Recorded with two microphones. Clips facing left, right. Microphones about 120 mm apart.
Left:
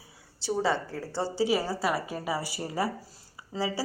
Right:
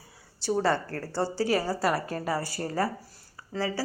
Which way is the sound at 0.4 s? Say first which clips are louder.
Right 2 dB; centre (ahead or behind).